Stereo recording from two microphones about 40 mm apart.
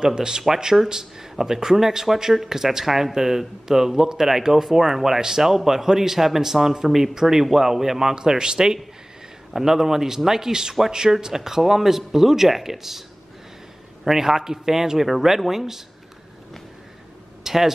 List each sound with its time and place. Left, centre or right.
0.0 s speech: centre
1.4 s speech: centre
14.0 s speech: centre
17.4 s a sound: centre